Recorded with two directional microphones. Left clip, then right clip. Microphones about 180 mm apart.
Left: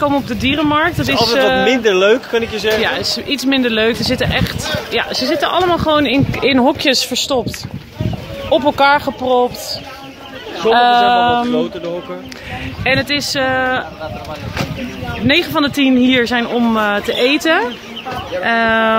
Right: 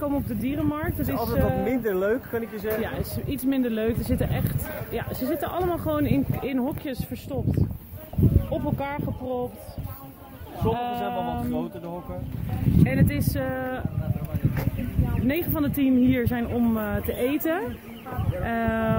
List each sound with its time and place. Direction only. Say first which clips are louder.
0.0 s speech: left 13 dB; 10° left (ahead or behind)
2.0 s speech: left 13 dB; 30° left (ahead or behind)
2.8 s speech: left 15 dB; 5° right (ahead or behind)
6.4 s speech: left 17 dB; 35° left (ahead or behind)
8.5 s speech: left 18 dB; 35° left (ahead or behind)
10.7 s speech: left 18 dB; 35° left (ahead or behind)
12.8 s speech: left 14 dB; centre (ahead or behind)
15.2 s speech: left 13 dB; centre (ahead or behind)